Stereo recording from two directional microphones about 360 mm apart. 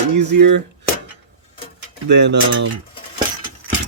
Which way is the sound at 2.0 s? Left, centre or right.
Right.